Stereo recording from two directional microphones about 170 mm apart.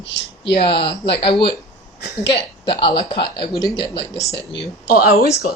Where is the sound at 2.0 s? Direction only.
75° left (ahead or behind).